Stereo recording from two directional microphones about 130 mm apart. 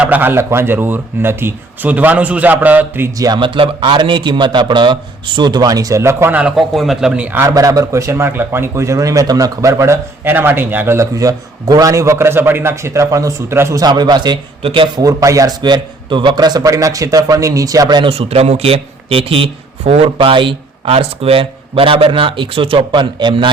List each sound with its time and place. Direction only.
0.0 s speech: 15° right (ahead or behind)
3.2 s a man's voice: 35° right (ahead or behind); by 7.3 s 5° right (ahead or behind)
7.3 s a man's voice: 25° right (ahead or behind); by 15.0 s 40° right (ahead or behind)
15.0 s a man's voice: 25° right (ahead or behind)